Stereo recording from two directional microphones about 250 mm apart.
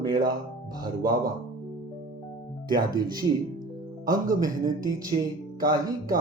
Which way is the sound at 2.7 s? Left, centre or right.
Centre.